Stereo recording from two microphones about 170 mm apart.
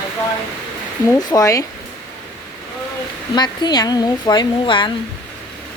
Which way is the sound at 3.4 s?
25° left (ahead or behind).